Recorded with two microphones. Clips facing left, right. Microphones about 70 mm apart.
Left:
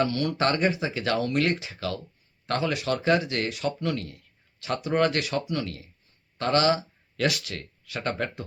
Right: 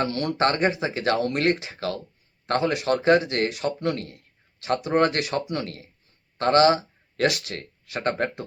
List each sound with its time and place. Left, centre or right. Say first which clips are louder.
0.0 s speech: right 1 dB; right